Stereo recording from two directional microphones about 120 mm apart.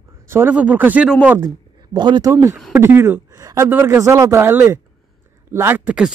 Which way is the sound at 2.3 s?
25° right (ahead or behind).